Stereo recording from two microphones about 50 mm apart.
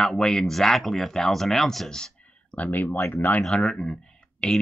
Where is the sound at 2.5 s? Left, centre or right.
Left.